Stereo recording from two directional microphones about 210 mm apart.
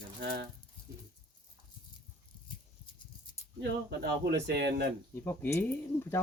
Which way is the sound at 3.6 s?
55° right (ahead or behind).